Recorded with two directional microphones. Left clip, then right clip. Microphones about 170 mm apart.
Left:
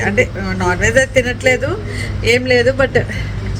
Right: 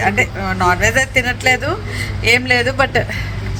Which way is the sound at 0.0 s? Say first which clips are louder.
Even; centre (ahead or behind).